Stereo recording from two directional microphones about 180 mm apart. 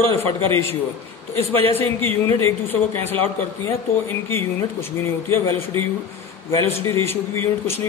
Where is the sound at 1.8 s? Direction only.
10° left (ahead or behind).